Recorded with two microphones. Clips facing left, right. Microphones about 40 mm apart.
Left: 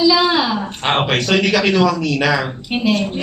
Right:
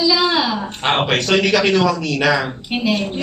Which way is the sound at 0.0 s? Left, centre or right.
Centre.